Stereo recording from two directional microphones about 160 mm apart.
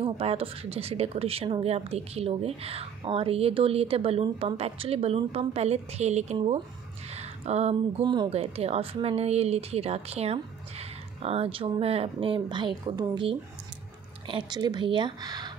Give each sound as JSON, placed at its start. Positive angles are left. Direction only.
{"t": 0.0, "sound": "speech", "side_deg": -35}
{"t": 7.2, "sound": "a sound", "side_deg": -45}
{"t": 8.0, "sound": "speech", "side_deg": -30}
{"t": 8.3, "sound": "speech", "side_deg": -40}